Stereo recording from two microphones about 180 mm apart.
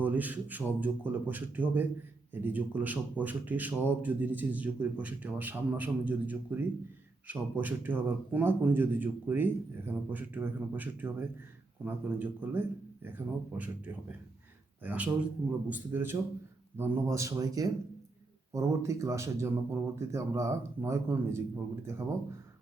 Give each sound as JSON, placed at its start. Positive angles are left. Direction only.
{"t": 0.0, "sound": "speech", "side_deg": -10}